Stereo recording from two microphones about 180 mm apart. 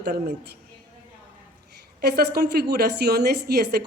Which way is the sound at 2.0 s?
60° right (ahead or behind).